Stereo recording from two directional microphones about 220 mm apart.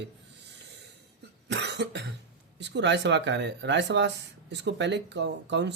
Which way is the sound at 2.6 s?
50° right (ahead or behind).